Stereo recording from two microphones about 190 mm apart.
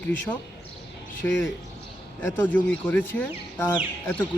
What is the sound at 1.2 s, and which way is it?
A man's voice, 10° left (ahead or behind).